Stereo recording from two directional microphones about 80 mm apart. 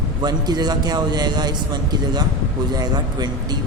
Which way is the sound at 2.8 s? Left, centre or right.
Right.